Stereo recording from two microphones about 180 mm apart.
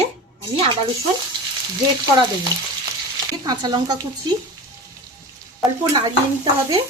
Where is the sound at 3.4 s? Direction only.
20° right (ahead or behind).